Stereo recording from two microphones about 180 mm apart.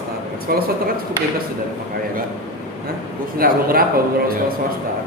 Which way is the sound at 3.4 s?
55° right (ahead or behind).